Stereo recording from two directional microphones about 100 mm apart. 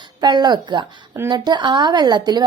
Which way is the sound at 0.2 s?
45° right (ahead or behind).